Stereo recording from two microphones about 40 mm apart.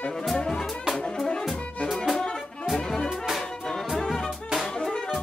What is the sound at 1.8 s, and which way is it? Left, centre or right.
Music, centre.